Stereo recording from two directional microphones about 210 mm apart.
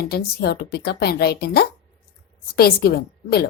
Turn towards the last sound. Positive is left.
turn(degrees=45)  # may be behind; listen again after turning